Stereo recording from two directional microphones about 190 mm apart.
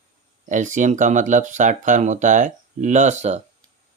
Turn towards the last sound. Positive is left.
turn(degrees=-35)  # may be behind; listen again after turning